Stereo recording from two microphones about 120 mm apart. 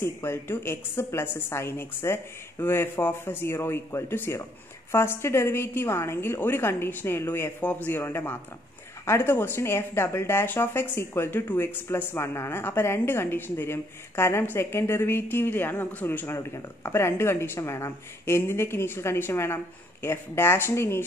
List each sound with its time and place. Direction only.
0.0 s speech: 20° left (ahead or behind)